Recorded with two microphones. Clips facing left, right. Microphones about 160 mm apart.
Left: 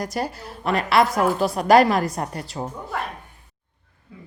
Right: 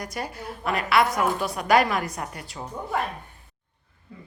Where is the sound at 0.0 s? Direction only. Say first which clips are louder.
Left 5 dB; 35° left (ahead or behind).